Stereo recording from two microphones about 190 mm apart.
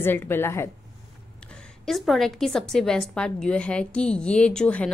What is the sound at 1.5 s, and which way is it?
A woman's voice, centre (ahead or behind).